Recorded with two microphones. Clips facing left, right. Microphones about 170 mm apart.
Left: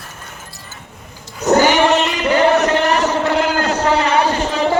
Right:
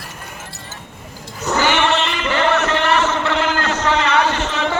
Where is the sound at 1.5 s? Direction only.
40° left (ahead or behind).